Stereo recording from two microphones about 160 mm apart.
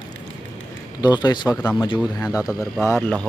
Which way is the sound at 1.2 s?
25° left (ahead or behind).